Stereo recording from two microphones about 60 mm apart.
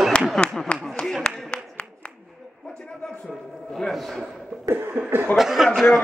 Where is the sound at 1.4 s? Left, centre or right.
Left.